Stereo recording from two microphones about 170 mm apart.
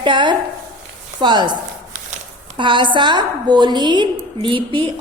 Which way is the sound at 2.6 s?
30° right (ahead or behind).